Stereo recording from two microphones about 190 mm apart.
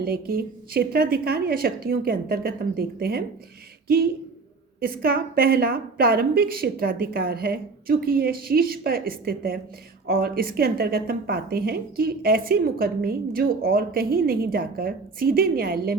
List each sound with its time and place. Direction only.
0.0 s speech: 55° right (ahead or behind)